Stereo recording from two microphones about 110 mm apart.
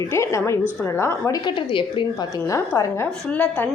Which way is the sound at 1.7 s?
50° left (ahead or behind).